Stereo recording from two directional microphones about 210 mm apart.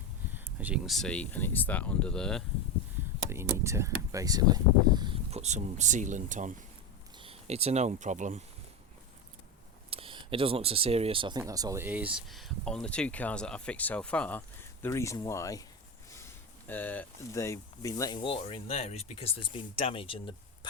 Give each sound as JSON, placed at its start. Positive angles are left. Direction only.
{"t": 0.3, "sound": "speech", "side_deg": -5}
{"t": 3.2, "sound": "speech", "side_deg": -10}
{"t": 9.9, "sound": "speech", "side_deg": -25}